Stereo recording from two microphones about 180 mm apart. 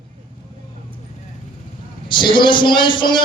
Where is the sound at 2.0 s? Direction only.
25° left (ahead or behind).